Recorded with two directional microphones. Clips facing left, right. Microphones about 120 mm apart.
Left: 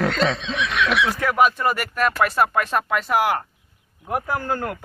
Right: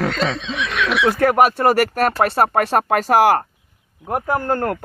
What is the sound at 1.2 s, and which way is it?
Speech, 55° right (ahead or behind).